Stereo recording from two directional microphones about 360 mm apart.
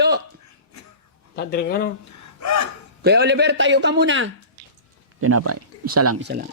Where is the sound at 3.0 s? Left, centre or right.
Right.